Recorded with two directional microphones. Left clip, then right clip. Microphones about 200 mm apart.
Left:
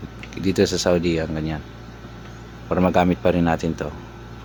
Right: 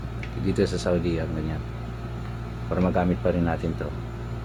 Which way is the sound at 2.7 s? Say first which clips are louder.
Left 6 dB; 55° left (ahead or behind).